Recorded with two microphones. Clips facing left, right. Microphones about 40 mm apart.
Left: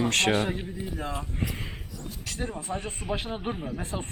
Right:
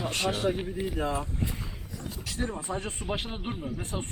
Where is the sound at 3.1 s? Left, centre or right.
Centre.